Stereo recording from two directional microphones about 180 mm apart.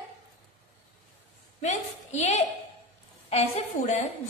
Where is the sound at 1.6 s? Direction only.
40° left (ahead or behind).